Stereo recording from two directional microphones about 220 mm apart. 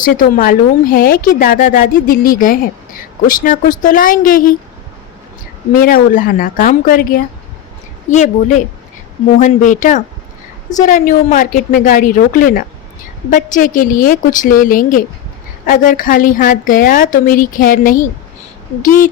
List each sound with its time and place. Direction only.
0.2 s a woman's voice: 40° left (ahead or behind)
5.7 s a woman's voice: 40° left (ahead or behind)